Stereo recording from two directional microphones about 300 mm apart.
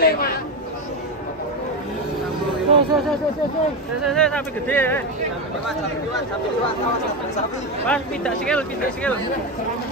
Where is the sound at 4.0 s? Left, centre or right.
Centre.